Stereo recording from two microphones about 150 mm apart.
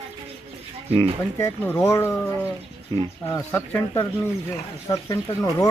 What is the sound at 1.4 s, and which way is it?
Speech, 15° left (ahead or behind).